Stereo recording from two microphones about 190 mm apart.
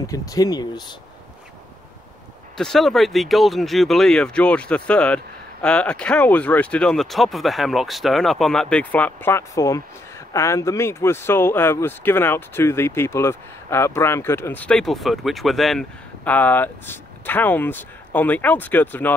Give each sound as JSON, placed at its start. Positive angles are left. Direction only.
{"t": 0.0, "sound": "speech", "side_deg": 20}
{"t": 2.5, "sound": "speech", "side_deg": 0}